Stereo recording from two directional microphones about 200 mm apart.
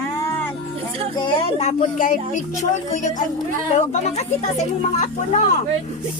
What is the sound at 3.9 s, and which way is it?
Speech, 35° left (ahead or behind).